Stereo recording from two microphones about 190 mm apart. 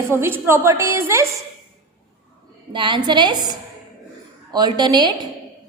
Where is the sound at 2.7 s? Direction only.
25° right (ahead or behind).